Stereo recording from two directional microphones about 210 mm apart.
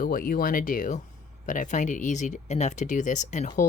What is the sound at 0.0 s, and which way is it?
Speech, 45° left (ahead or behind).